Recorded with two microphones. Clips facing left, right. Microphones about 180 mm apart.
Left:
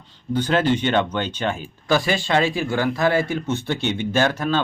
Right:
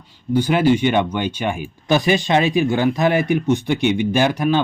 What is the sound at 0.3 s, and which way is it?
Speech, 10° right (ahead or behind).